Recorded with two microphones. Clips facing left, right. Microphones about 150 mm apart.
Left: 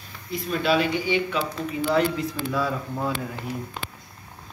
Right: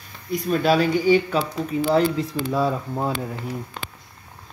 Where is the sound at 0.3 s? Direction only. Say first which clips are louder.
Right 4 dB; 45° right (ahead or behind).